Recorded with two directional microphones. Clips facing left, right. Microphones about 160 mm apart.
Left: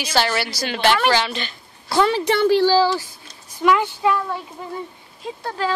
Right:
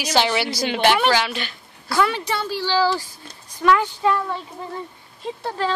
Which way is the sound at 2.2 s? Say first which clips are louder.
Left 9 dB; 65° left (ahead or behind).